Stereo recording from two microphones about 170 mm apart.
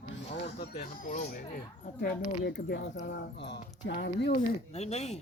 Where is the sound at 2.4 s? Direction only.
70° left (ahead or behind).